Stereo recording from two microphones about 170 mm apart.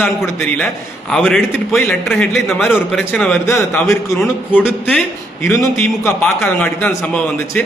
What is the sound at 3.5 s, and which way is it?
Speech, 15° left (ahead or behind).